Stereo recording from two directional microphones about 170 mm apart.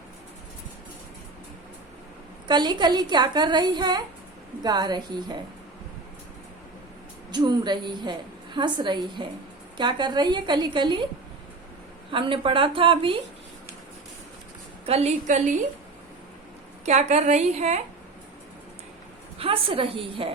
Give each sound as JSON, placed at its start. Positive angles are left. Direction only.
{"t": 2.5, "sound": "a woman's voice", "side_deg": -25}
{"t": 7.3, "sound": "a woman's voice", "side_deg": -25}
{"t": 12.1, "sound": "a woman's voice", "side_deg": -30}
{"t": 14.8, "sound": "a woman's voice", "side_deg": -40}
{"t": 16.8, "sound": "a woman's voice", "side_deg": -40}
{"t": 19.4, "sound": "a woman's voice", "side_deg": -35}